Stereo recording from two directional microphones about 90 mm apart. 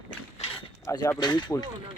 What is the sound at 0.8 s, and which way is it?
Speech, 40° left (ahead or behind).